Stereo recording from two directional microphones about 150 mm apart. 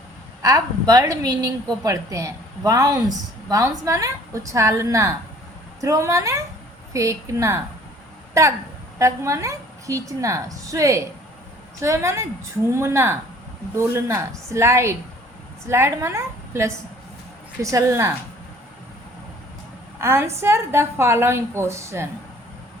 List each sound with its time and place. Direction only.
0.4 s a woman's voice: 25° right (ahead or behind)
8.3 s a sound: 20° right (ahead or behind)
9.0 s a woman's voice: 20° right (ahead or behind)
20.0 s a woman's voice: 15° right (ahead or behind)